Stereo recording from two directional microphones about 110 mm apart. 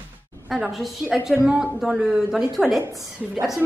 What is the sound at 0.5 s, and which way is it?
A woman's voice, 5° right (ahead or behind).